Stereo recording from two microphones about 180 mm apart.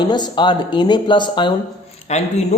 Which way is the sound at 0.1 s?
25° left (ahead or behind).